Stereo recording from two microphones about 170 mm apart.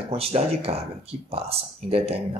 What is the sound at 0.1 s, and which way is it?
Speech, 35° right (ahead or behind).